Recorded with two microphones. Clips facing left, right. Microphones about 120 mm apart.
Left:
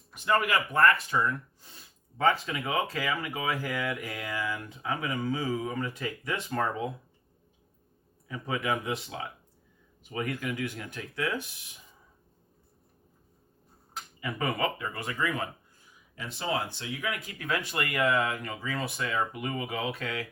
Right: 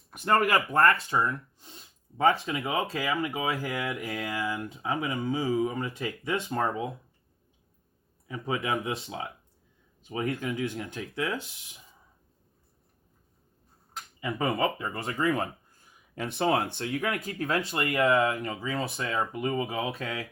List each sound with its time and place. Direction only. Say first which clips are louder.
0.1 s speech: right 3 dB; 50° right (ahead or behind)
1.1 s speech: right 1 dB; 25° right (ahead or behind)
8.3 s speech: right 1 dB; 25° right (ahead or behind)
14.2 s speech: right 3 dB; 25° right (ahead or behind)
15.8 s speech: right 7 dB; 60° right (ahead or behind)
17.3 s speech: right 3 dB; 30° right (ahead or behind)